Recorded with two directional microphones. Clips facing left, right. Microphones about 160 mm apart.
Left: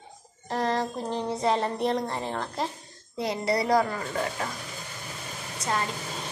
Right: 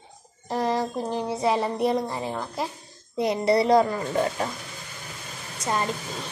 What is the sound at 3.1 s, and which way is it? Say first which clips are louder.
Speech: right 5 dB; 20° right (ahead or behind).